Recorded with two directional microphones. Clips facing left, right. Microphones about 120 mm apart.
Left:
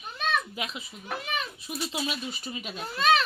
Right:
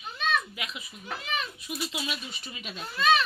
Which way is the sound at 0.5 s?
30° left (ahead or behind).